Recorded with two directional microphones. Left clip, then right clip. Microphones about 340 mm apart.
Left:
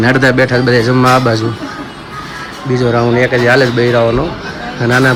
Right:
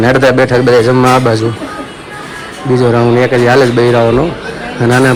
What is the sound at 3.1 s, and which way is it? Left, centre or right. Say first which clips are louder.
Speech: even; right.